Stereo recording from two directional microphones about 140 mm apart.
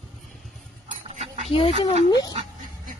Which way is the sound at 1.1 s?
55° right (ahead or behind).